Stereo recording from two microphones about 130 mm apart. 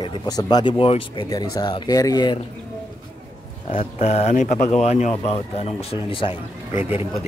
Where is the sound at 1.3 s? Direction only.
30° left (ahead or behind).